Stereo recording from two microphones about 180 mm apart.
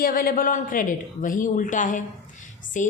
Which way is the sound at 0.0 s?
50° left (ahead or behind).